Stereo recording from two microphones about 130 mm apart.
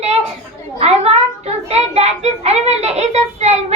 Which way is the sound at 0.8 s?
50° right (ahead or behind).